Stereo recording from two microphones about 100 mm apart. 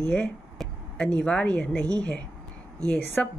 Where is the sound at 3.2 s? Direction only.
10° left (ahead or behind).